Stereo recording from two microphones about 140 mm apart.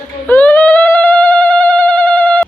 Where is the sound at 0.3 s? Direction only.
10° left (ahead or behind).